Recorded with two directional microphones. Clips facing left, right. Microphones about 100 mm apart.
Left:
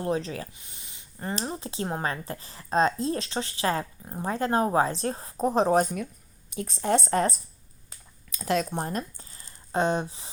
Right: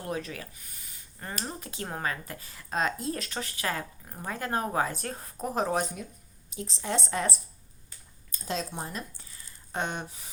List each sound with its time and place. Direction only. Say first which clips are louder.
0.0 s speech: left 6 dB; 30° left (ahead or behind)
6.5 s speech: left 7 dB; 55° left (ahead or behind)
7.9 s a sound: left 4 dB; 90° left; by 10.2 s 30° left (ahead or behind)